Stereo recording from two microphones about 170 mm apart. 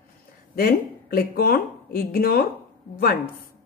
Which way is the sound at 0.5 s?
65° left (ahead or behind).